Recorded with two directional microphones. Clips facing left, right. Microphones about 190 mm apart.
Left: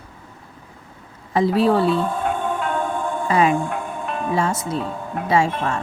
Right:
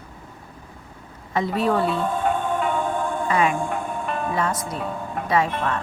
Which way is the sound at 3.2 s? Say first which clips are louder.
Left 5 dB; 35° left (ahead or behind).